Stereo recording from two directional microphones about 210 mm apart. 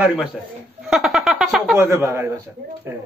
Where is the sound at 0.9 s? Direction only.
Centre (ahead or behind).